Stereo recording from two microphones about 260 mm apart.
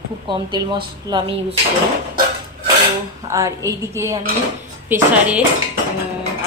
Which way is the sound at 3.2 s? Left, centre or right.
Centre.